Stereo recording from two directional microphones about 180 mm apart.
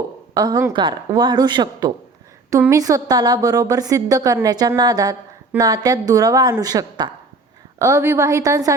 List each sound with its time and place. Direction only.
0.3 s a woman's voice: 20° right (ahead or behind)